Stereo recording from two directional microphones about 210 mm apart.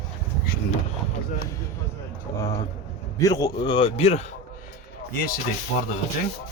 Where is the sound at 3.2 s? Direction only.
15° left (ahead or behind).